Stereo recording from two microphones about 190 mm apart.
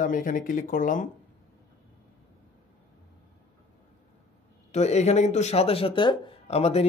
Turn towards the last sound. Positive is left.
turn(degrees=35)  # may be behind; listen again after turning